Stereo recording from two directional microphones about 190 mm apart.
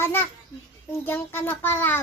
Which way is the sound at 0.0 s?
10° left (ahead or behind).